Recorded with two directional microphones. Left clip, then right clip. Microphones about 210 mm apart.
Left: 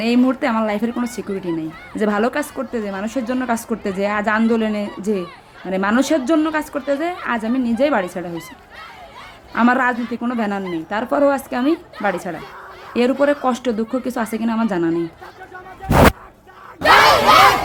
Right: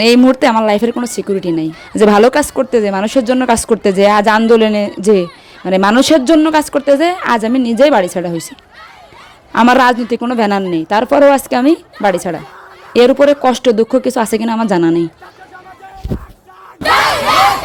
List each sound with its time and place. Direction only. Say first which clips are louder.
0.0 s speech: right 9 dB; 35° right (ahead or behind)
9.5 s speech: right 8 dB; 40° right (ahead or behind)